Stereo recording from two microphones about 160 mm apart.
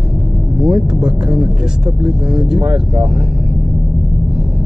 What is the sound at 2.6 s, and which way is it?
Speech, 5° right (ahead or behind).